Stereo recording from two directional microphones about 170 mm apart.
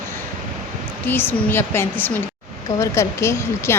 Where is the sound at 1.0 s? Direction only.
10° left (ahead or behind).